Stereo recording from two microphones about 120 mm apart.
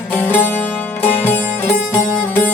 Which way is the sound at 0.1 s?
15° left (ahead or behind).